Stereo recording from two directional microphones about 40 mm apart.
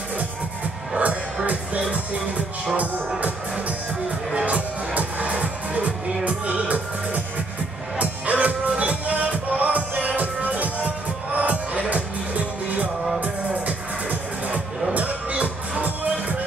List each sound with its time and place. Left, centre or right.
0.9 s music: right
3.2 s music: right
15.0 s music: right